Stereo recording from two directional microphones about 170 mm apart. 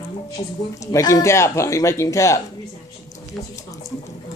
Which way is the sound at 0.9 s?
20° left (ahead or behind).